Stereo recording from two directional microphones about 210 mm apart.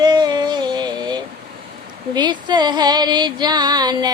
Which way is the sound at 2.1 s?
20° right (ahead or behind).